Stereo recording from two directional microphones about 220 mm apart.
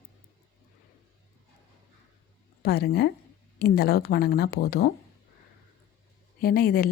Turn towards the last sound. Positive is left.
turn(degrees=40)  # may be behind; listen again after turning